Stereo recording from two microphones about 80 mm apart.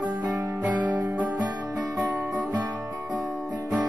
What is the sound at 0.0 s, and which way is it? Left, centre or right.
Music, right.